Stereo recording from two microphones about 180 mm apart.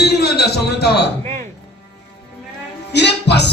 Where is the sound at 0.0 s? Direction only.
65° left (ahead or behind).